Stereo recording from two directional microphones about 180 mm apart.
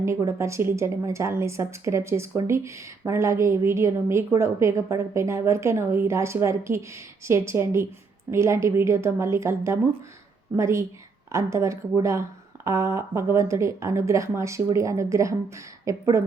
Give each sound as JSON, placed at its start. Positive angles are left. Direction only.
{"t": 0.0, "sound": "a woman's voice", "side_deg": -15}